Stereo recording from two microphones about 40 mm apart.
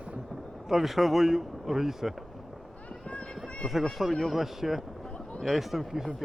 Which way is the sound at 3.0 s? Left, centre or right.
Left.